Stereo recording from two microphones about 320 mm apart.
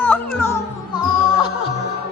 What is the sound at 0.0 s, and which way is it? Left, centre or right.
Music, centre.